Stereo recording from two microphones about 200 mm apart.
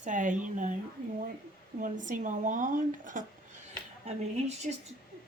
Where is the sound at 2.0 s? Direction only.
40° right (ahead or behind).